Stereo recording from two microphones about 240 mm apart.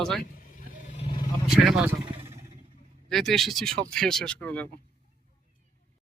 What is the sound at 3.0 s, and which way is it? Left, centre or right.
Speech, centre.